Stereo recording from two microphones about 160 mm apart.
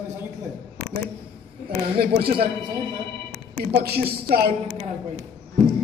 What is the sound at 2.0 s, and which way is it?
Speech, 75° right (ahead or behind).